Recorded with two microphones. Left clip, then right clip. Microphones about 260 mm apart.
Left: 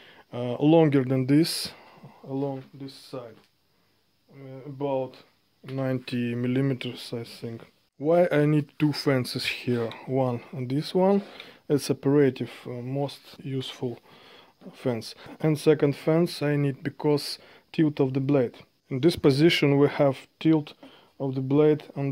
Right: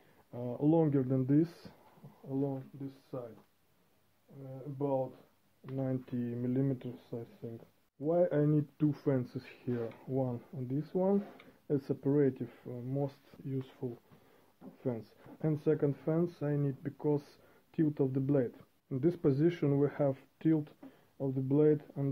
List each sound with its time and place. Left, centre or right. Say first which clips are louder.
0.3 s speech: left 10 dB; left
3.1 s speech: left 5 dB; left
4.7 s speech: left 6 dB; left